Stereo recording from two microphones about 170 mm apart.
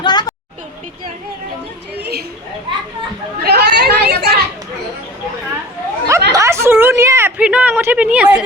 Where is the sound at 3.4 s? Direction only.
75° right (ahead or behind).